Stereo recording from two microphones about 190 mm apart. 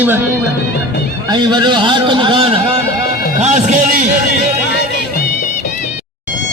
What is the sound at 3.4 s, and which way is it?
Speech, 40° right (ahead or behind).